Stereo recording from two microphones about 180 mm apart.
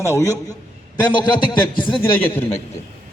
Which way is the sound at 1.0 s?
25° left (ahead or behind).